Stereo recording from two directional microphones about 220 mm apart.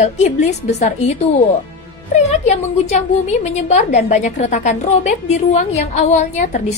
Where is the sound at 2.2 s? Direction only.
30° left (ahead or behind).